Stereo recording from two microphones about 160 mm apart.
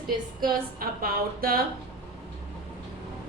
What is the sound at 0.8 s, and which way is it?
Speech, 65° right (ahead or behind).